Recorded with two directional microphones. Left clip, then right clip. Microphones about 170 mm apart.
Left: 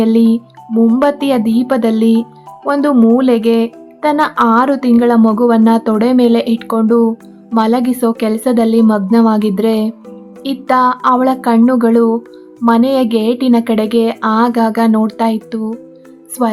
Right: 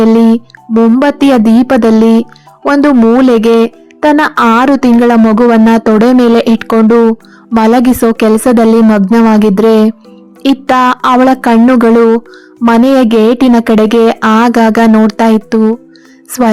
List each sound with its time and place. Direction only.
1.0 s speech: 30° right (ahead or behind)